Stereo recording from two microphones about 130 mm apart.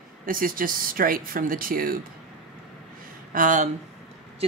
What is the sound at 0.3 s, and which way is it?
Speech, 90° right.